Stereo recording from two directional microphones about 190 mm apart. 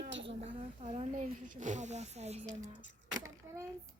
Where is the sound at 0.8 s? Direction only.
35° right (ahead or behind).